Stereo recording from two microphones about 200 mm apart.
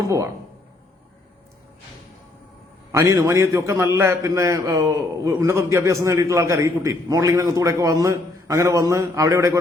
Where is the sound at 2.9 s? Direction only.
15° right (ahead or behind).